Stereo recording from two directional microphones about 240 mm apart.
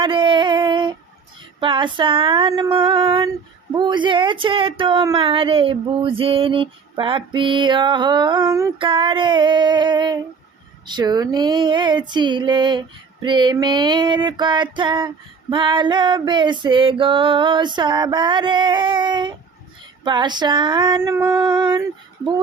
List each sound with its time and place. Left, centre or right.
0.0 s a sound: right
1.5 s speech: right
20.1 s female singing: centre